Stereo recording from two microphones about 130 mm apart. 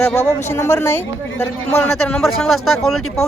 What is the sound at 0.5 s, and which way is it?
A woman's voice, 20° left (ahead or behind).